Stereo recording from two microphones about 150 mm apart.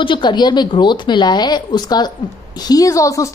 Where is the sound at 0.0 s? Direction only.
30° left (ahead or behind).